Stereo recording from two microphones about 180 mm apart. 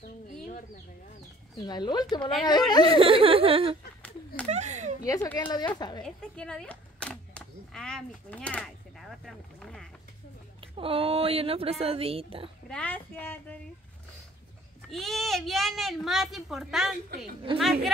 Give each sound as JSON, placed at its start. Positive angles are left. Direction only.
{"t": 1.6, "sound": "speech", "side_deg": 25}
{"t": 3.0, "sound": "speech", "side_deg": -30}
{"t": 4.5, "sound": "a sound", "side_deg": -40}
{"t": 5.0, "sound": "speech", "side_deg": 15}
{"t": 6.0, "sound": "a woman's voice", "side_deg": 5}
{"t": 10.6, "sound": "speech", "side_deg": -30}
{"t": 12.6, "sound": "speech", "side_deg": 5}
{"t": 14.9, "sound": "a woman's voice", "side_deg": 0}